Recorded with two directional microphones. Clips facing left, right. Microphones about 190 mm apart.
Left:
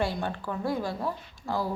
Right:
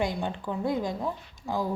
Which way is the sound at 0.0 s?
15° right (ahead or behind).